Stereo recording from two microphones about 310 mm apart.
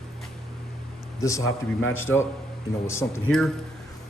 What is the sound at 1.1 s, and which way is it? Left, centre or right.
A man's voice, centre.